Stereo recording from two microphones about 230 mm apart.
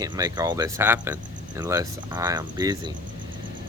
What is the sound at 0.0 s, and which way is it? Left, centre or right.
Speech, centre.